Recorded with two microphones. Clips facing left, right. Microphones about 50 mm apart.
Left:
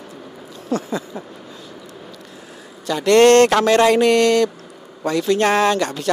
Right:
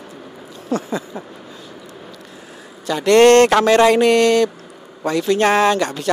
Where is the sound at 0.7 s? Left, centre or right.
Centre.